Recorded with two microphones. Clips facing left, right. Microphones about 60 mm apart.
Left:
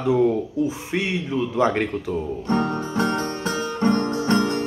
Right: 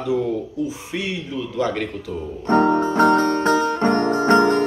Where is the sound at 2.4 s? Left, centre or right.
Right.